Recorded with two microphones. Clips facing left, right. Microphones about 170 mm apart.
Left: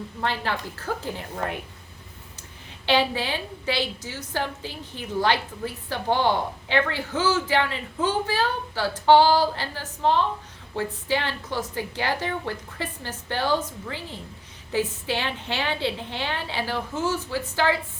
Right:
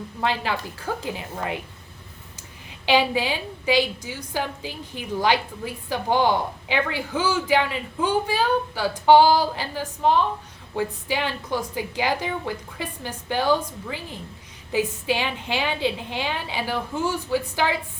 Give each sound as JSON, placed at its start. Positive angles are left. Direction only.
{"t": 0.2, "sound": "a woman's voice", "side_deg": -15}
{"t": 2.8, "sound": "a woman's voice", "side_deg": -10}